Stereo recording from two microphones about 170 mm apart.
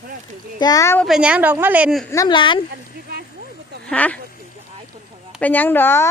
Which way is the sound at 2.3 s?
30° left (ahead or behind).